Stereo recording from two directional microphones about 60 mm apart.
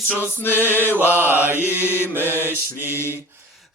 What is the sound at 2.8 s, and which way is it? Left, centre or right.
Chant, left.